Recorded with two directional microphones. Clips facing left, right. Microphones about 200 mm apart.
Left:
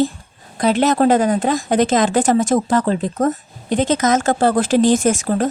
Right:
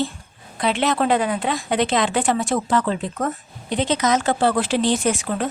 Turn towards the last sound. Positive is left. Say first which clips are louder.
# left 5 dB
turn(degrees=40)  # may be behind; listen again after turning